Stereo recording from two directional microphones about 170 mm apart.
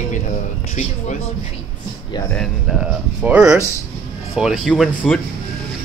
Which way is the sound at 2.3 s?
5° left (ahead or behind).